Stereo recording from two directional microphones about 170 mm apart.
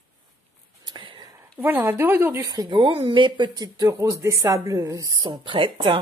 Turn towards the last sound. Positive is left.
turn(degrees=-30)  # may be behind; listen again after turning